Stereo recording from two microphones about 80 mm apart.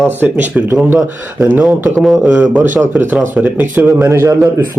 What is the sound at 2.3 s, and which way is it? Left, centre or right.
Speech, right.